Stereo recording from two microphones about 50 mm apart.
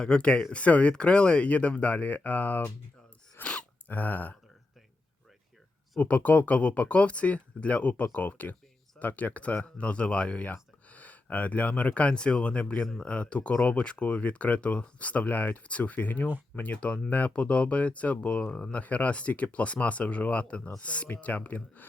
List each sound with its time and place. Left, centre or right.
0.0 s speech: centre; by 2.6 s left
3.4 s a sound: left
3.8 s speech: left
6.0 s speech: left